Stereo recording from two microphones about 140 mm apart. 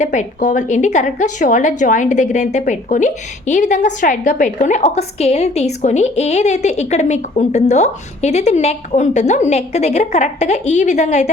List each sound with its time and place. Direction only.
0.0 s a woman's voice: 60° left (ahead or behind)